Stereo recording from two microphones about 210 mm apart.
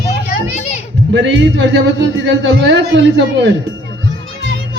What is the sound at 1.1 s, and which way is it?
A man's voice, 60° right (ahead or behind).